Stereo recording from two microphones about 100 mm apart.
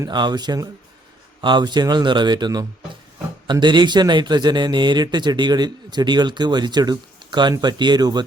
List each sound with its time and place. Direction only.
0.1 s a man's voice: 45° right (ahead or behind)